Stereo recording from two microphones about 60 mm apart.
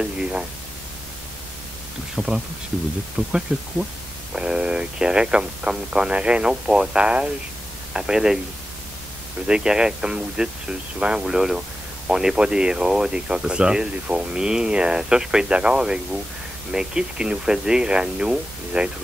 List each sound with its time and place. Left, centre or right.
0.0 s speech: centre
2.1 s speech: centre
9.5 s speech: centre